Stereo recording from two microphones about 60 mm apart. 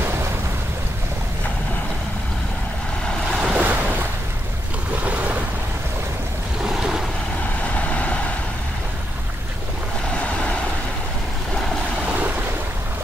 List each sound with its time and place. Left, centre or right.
0.0 s waves: right
3.3 s waves: centre
3.6 s waves: right
5.0 s waves: right
6.7 s boat: centre
7.7 s vehicle: left
10.1 s vehicle: centre